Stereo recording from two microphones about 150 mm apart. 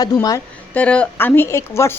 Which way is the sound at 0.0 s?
25° left (ahead or behind).